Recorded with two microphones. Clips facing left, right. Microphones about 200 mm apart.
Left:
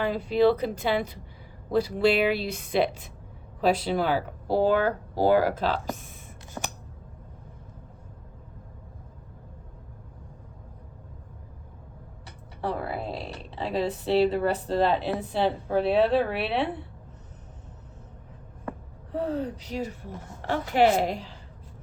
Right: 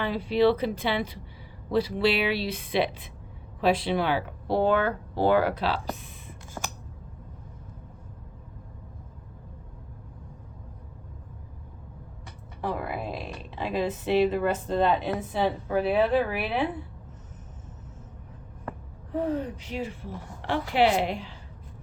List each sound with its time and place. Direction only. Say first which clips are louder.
0.0 s speech: left 1 dB; 45° left (ahead or behind)
12.6 s speech: left 1 dB; 30° left (ahead or behind)
19.5 s speech: left 1 dB; 40° left (ahead or behind)